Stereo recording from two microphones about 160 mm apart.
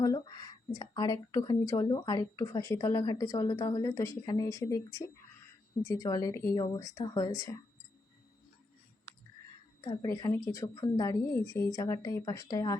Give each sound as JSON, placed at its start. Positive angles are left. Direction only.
{"t": 0.0, "sound": "speech", "side_deg": 25}
{"t": 9.8, "sound": "speech", "side_deg": 20}